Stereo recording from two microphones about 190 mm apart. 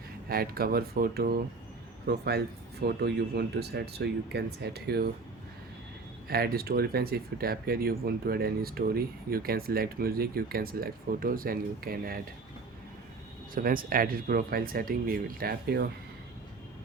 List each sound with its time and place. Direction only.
0.3 s speech: 50° right (ahead or behind)
6.2 s speech: 55° right (ahead or behind)
13.5 s speech: 50° right (ahead or behind)